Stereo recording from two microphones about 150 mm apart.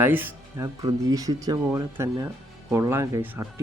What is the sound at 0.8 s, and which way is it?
Speech, 25° right (ahead or behind).